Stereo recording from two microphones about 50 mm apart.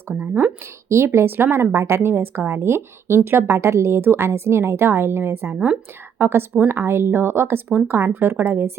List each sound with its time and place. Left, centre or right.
0.1 s speech: right
0.9 s speech: right
1.7 s a woman's voice: right